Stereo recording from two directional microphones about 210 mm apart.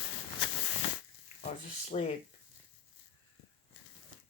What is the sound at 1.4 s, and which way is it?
Speech, 30° left (ahead or behind).